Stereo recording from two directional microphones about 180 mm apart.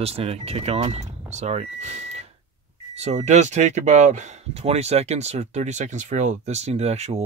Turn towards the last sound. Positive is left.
turn(degrees=-35)  # may be behind; listen again after turning